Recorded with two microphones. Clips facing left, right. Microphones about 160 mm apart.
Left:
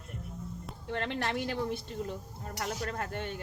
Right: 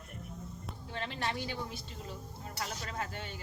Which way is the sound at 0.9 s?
65° left (ahead or behind).